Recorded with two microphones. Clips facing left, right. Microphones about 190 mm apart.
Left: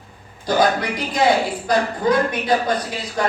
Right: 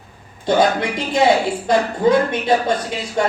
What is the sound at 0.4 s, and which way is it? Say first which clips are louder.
Speech: right 2 dB; 25° right (ahead or behind).